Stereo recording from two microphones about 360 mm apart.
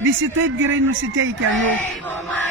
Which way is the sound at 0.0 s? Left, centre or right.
Right.